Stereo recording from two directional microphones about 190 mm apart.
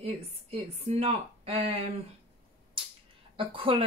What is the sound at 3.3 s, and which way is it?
Speech, 30° right (ahead or behind).